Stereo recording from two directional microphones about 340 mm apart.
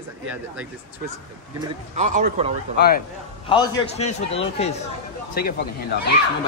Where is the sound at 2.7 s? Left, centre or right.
Left.